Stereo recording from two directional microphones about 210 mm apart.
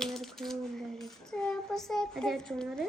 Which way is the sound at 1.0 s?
5° left (ahead or behind).